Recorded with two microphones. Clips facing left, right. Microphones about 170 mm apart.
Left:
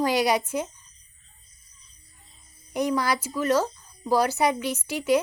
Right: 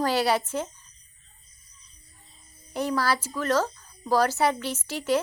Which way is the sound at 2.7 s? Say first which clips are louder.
Left 1 dB; 15° left (ahead or behind).